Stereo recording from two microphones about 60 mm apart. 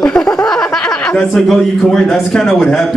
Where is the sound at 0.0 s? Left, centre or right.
Centre.